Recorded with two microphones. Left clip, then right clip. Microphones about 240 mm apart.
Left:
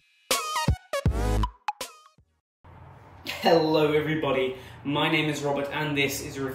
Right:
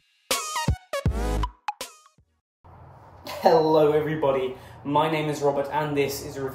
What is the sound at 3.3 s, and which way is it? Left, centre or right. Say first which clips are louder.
Speech: right 3 dB; centre.